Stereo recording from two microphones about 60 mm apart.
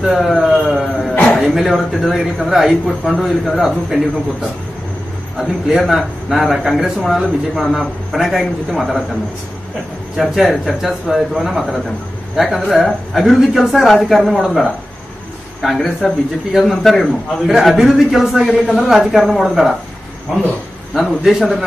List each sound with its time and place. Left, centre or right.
0.0 s a sound: centre
1.1 s a sound: left
1.4 s a man's voice: centre
5.4 s a man's voice: centre
10.3 s a man's voice: centre
20.9 s a man's voice: centre